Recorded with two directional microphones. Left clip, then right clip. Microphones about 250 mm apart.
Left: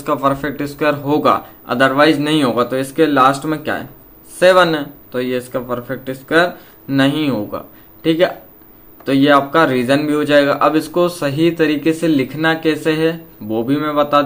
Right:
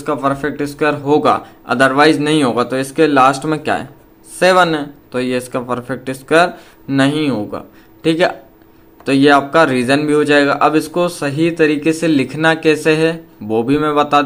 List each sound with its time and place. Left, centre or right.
0.0 s speech: centre